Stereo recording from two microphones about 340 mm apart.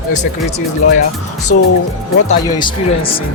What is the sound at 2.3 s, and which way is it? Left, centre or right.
Speech, centre.